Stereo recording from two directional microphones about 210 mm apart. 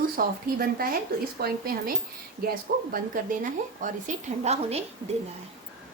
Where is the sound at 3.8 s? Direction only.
35° right (ahead or behind).